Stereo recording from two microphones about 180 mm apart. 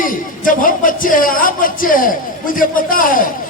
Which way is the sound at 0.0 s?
50° left (ahead or behind).